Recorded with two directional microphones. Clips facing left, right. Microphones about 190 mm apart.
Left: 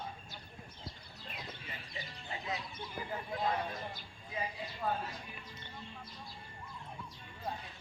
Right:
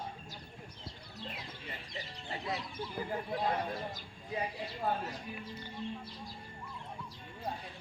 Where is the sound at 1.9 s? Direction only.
35° right (ahead or behind).